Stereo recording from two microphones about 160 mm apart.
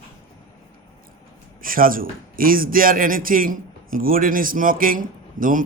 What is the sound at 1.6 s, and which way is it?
A man's voice, 60° right (ahead or behind).